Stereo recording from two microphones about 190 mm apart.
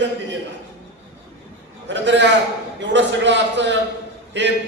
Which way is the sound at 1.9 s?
70° right (ahead or behind).